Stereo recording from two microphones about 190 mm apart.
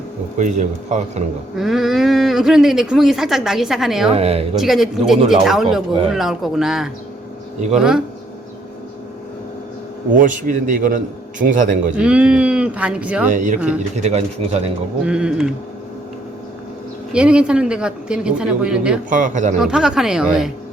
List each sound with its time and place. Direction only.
0.3 s a man's voice: 40° right (ahead or behind)
1.5 s speech: centre (ahead or behind)
4.1 s a man's voice: 30° right (ahead or behind)
4.5 s speech: centre (ahead or behind)
10.2 s a man's voice: 45° right (ahead or behind)
11.9 s speech: 5° right (ahead or behind)
13.3 s a man's voice: 40° right (ahead or behind)
15.0 s speech: 5° right (ahead or behind)
17.1 s speech: 5° right (ahead or behind)
19.1 s a man's voice: 40° right (ahead or behind)
19.5 s speech: 5° right (ahead or behind)